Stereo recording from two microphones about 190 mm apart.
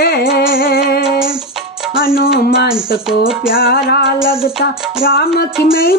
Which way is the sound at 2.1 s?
50° left (ahead or behind).